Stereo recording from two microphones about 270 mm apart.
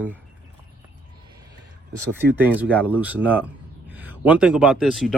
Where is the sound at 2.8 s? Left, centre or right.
Centre.